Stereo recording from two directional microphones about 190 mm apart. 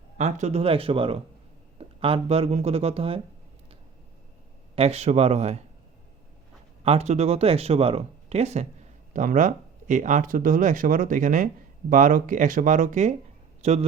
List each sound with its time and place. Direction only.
0.2 s speech: 35° right (ahead or behind)
4.7 s speech: 30° right (ahead or behind)
6.8 s speech: 35° right (ahead or behind)